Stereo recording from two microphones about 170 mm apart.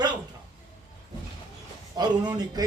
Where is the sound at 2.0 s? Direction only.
25° right (ahead or behind).